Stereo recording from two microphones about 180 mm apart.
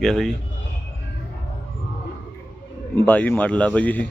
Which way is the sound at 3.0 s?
10° left (ahead or behind).